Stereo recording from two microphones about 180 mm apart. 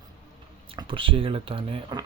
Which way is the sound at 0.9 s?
30° right (ahead or behind).